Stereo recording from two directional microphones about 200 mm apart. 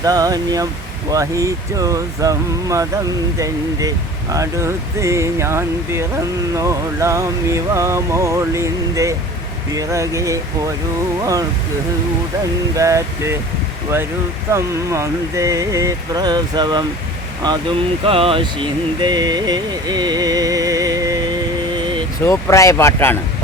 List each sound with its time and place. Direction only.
0.0 s speech: 20° right (ahead or behind)
12.7 s speech: 15° right (ahead or behind)
14.5 s speech: 15° right (ahead or behind)
17.4 s a sound: 25° right (ahead or behind)
21.8 s vehicle: 25° right (ahead or behind)
22.2 s speech: 15° left (ahead or behind)